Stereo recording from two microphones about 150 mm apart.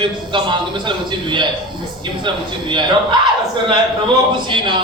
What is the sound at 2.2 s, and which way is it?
Speech, 30° right (ahead or behind).